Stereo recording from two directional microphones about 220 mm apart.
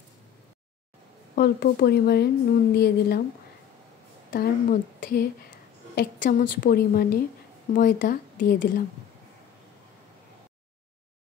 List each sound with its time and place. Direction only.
1.3 s a woman's voice: 45° left (ahead or behind)
4.3 s a woman's voice: 40° left (ahead or behind)